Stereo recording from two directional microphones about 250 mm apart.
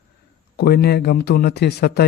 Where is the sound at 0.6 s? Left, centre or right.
Left.